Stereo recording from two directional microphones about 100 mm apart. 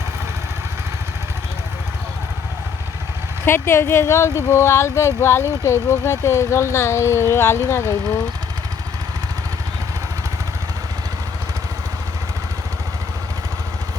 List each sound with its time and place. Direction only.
3.4 s speech: 25° left (ahead or behind)